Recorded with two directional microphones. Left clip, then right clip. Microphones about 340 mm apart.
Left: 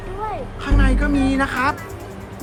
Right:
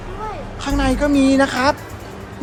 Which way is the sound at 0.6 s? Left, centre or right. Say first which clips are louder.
Right 4 dB; centre.